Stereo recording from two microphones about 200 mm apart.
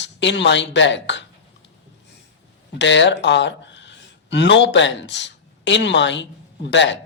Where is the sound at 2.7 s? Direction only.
65° left (ahead or behind).